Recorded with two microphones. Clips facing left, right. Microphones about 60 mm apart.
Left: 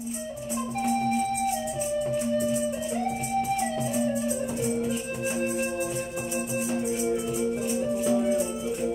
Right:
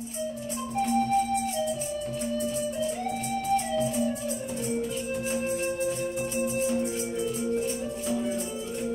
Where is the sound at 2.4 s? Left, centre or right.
Centre.